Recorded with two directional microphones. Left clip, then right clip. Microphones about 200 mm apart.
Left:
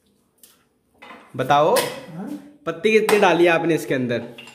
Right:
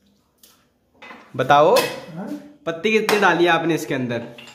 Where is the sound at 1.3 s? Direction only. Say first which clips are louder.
Right 3 dB; centre (ahead or behind).